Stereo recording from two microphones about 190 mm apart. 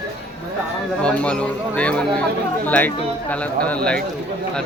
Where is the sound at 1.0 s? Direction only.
5° left (ahead or behind).